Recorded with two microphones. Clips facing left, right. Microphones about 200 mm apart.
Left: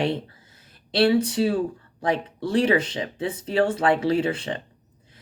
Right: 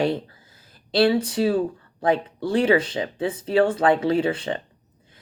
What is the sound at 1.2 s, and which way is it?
Speech, 25° left (ahead or behind).